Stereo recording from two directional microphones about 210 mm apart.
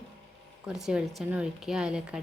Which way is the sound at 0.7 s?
Centre (ahead or behind).